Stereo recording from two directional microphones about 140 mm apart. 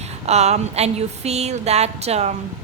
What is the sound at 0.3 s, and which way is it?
A woman's voice, 50° right (ahead or behind).